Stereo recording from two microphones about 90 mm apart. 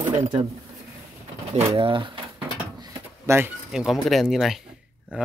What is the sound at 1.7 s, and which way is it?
Speech, 70° right (ahead or behind).